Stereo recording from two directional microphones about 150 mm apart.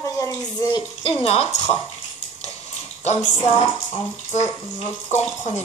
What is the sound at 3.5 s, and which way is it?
Speech, 40° left (ahead or behind).